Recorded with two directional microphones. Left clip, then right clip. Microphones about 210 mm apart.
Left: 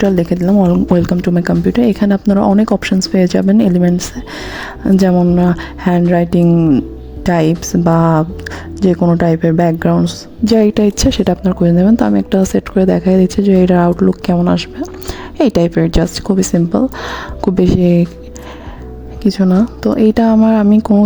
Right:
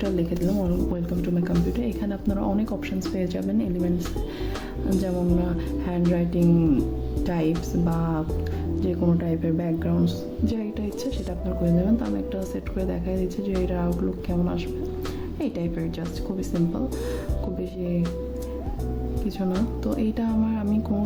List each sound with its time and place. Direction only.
0.0 s a woman's voice: 45° left (ahead or behind)
5.0 s a woman's voice: 45° left (ahead or behind)
19.2 s a woman's voice: 45° left (ahead or behind)